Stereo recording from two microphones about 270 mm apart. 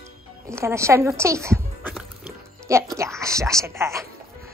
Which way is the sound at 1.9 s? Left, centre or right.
Centre.